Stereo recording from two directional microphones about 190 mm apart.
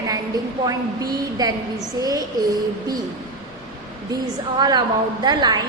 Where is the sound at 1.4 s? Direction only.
20° right (ahead or behind).